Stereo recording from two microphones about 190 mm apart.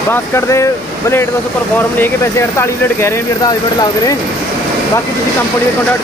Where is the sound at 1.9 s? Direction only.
10° left (ahead or behind).